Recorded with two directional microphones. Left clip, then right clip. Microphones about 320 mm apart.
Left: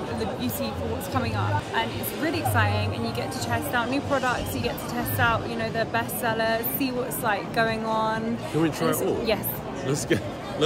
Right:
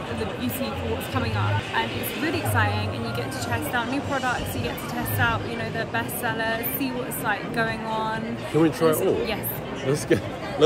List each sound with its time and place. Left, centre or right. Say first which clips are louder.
1.8 s speech: right 1 dB; centre
8.5 s speech: right 5 dB; centre